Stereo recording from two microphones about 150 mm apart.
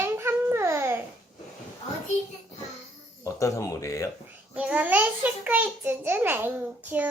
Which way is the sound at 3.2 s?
20° left (ahead or behind).